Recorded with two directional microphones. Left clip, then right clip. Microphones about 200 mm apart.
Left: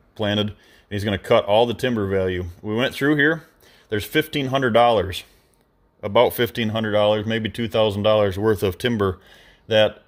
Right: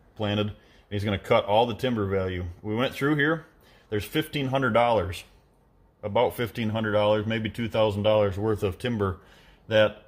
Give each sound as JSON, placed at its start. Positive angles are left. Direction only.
{"t": 0.2, "sound": "speech", "side_deg": 45}